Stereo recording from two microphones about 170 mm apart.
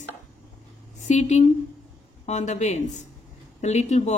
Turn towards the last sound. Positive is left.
turn(degrees=40)  # may be behind; listen again after turning